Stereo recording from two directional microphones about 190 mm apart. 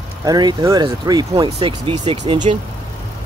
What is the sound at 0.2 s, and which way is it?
Speech, 20° right (ahead or behind).